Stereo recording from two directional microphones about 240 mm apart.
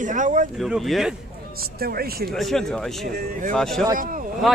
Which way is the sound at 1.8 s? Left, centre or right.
Right.